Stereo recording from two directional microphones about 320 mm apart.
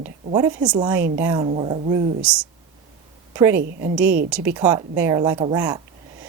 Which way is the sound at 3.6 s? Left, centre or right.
Right.